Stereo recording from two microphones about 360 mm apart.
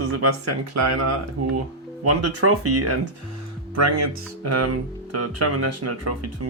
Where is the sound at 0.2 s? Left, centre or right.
Right.